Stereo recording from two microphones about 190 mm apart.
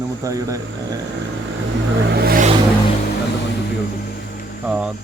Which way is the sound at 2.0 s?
55° right (ahead or behind).